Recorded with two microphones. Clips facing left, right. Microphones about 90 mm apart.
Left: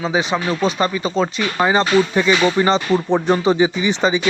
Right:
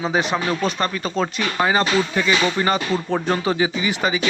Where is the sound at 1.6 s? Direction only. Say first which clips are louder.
Left 4 dB; 20° left (ahead or behind).